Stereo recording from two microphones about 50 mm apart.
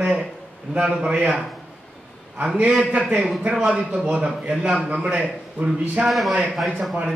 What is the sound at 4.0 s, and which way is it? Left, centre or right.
Speech, centre.